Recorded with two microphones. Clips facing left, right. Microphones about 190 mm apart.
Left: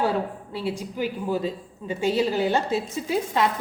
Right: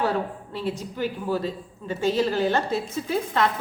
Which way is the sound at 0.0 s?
10° left (ahead or behind).